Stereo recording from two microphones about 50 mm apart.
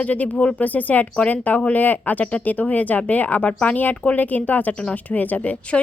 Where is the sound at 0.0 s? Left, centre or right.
Left.